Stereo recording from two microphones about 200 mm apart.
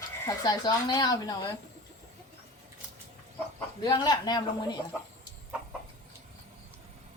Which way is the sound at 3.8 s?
20° left (ahead or behind).